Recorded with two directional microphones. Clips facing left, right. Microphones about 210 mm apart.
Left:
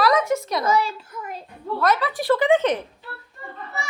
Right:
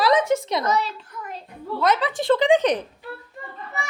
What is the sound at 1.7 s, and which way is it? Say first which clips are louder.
A child's voice: even; 20° right (ahead or behind).